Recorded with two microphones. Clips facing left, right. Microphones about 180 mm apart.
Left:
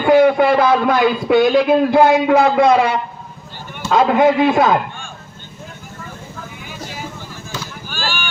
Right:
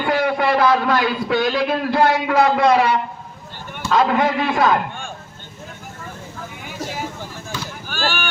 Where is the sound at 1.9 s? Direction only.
50° left (ahead or behind).